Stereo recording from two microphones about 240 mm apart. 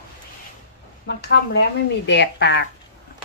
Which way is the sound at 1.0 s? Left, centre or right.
Left.